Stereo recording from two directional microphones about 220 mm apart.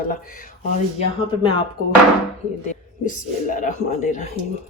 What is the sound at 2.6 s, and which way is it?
Speech, 35° left (ahead or behind).